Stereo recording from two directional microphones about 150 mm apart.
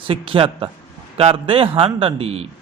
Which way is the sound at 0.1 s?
40° right (ahead or behind).